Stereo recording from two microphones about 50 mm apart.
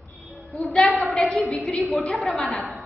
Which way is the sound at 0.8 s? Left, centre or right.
Centre.